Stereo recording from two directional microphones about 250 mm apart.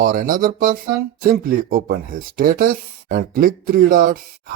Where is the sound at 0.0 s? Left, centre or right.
Right.